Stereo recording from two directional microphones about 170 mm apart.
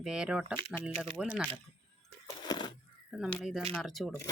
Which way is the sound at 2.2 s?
25° left (ahead or behind).